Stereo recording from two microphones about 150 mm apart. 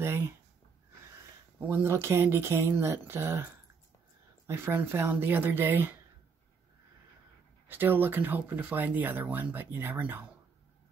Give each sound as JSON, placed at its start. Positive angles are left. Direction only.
{"t": 1.7, "sound": "speech", "side_deg": -15}
{"t": 4.5, "sound": "speech", "side_deg": -15}
{"t": 7.6, "sound": "speech", "side_deg": -15}